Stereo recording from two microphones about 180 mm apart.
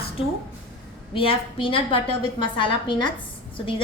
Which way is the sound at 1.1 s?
30° left (ahead or behind).